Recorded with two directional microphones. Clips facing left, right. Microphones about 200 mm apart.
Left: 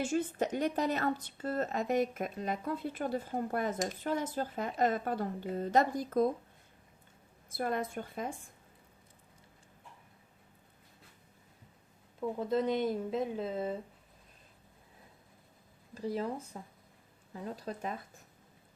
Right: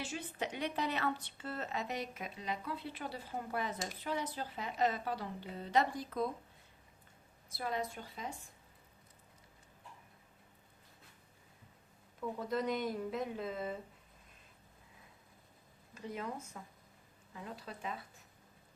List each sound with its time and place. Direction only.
0.0 s speech: 45° left (ahead or behind)
7.5 s speech: 50° left (ahead or behind)
12.2 s speech: 25° left (ahead or behind)
16.0 s speech: 35° left (ahead or behind)